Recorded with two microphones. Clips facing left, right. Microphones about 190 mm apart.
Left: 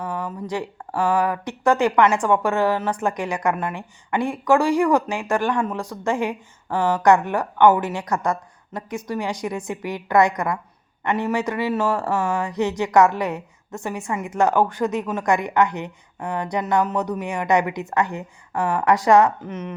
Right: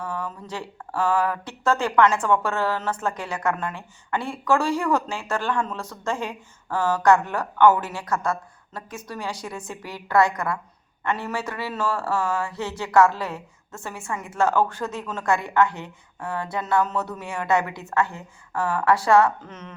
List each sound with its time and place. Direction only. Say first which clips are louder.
0.0 s speech: left 3 dB; 15° left (ahead or behind)